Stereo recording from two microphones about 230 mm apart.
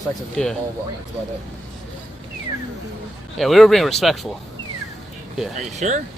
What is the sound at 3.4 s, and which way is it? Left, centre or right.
Speech, centre.